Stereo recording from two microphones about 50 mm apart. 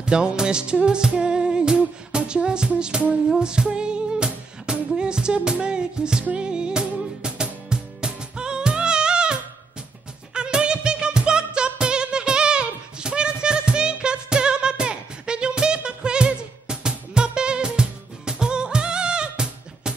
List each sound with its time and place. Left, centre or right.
0.0 s music: centre
3.3 s female singing: centre
4.9 s music: centre